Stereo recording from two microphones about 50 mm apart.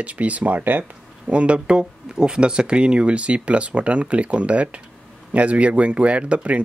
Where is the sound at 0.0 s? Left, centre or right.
Right.